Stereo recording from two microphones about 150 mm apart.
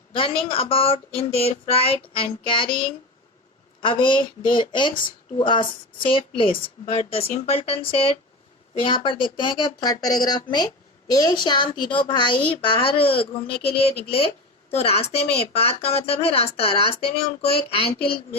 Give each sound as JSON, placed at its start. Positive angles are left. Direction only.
{"t": 0.1, "sound": "speech", "side_deg": 35}
{"t": 3.8, "sound": "speech", "side_deg": 35}
{"t": 14.7, "sound": "a woman's voice", "side_deg": 45}